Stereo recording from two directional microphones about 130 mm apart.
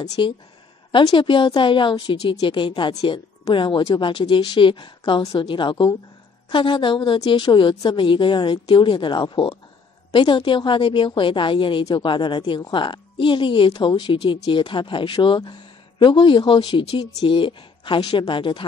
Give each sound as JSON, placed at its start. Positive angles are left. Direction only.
{"t": 0.0, "sound": "a woman's voice", "side_deg": 30}